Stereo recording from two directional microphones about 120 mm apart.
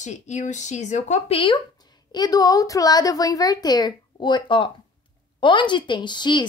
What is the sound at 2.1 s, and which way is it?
A woman's voice, 35° left (ahead or behind).